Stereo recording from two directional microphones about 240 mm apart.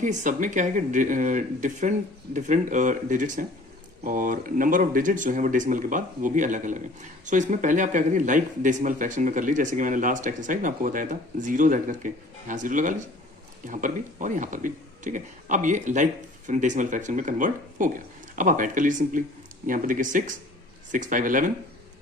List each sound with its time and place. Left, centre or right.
0.0 s speech: right